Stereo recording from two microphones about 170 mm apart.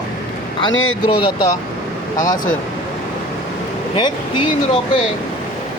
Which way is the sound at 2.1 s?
50° left (ahead or behind).